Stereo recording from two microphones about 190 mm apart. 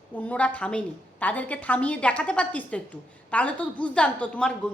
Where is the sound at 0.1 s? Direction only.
5° left (ahead or behind).